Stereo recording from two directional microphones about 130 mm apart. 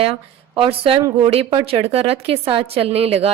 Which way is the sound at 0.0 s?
45° right (ahead or behind).